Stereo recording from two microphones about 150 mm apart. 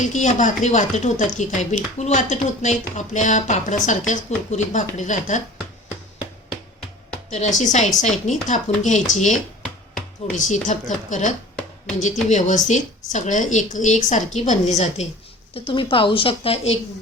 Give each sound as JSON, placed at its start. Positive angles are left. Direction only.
{"t": 0.0, "sound": "speech", "side_deg": 55}
{"t": 7.3, "sound": "speech", "side_deg": 50}
{"t": 15.5, "sound": "speech", "side_deg": 35}